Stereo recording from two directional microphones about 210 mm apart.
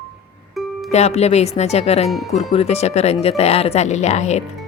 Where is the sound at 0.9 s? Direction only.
30° left (ahead or behind).